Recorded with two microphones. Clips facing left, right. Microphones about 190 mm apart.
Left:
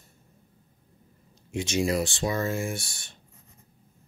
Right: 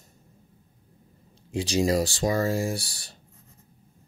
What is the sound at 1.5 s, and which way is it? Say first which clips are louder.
Speech: right 3 dB; 35° right (ahead or behind).